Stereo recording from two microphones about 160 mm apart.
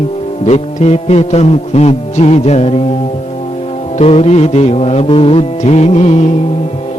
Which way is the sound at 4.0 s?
40° left (ahead or behind).